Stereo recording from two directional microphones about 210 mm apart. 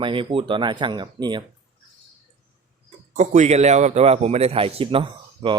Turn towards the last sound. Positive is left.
turn(degrees=-25)  # may be behind; listen again after turning